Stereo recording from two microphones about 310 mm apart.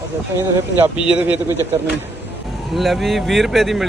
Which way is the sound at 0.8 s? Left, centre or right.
Centre.